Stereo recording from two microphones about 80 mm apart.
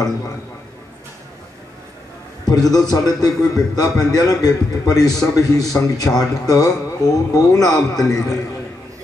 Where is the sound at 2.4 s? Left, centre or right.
Left.